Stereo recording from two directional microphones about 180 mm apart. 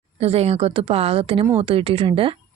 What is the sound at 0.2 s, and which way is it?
A woman's voice, 35° right (ahead or behind).